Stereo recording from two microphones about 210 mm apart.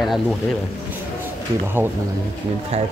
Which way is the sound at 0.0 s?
Centre (ahead or behind).